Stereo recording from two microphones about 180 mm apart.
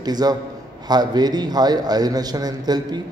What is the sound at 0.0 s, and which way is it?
A man's voice, 20° right (ahead or behind).